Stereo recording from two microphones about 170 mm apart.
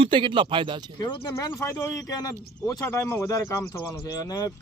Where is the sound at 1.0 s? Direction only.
25° left (ahead or behind).